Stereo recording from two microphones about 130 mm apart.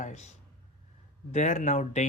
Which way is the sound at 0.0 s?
60° left (ahead or behind).